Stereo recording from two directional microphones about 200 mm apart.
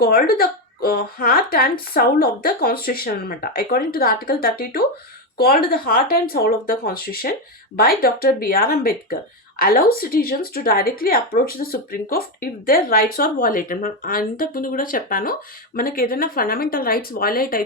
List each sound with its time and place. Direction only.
0.0 s speech: 50° left (ahead or behind)